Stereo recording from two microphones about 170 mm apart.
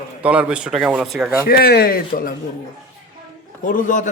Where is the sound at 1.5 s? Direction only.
65° left (ahead or behind).